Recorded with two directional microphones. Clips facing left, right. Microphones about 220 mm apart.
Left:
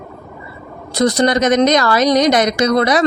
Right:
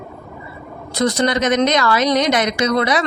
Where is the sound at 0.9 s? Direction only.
40° left (ahead or behind).